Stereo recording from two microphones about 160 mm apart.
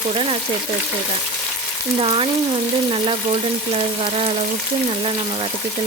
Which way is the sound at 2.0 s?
35° right (ahead or behind).